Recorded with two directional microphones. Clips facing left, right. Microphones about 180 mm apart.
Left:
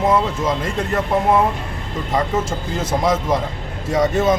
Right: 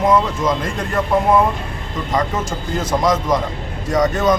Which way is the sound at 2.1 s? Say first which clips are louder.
Left 1 dB; 5° left (ahead or behind).